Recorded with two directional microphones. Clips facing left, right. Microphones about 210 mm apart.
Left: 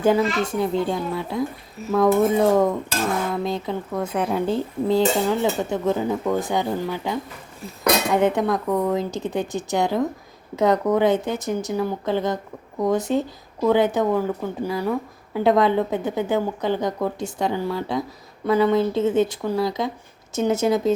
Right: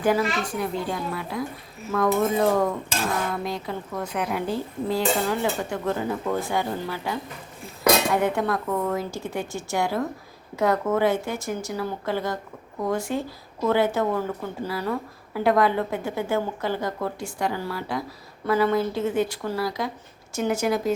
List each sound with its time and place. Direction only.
0.0 s speech: 25° left (ahead or behind)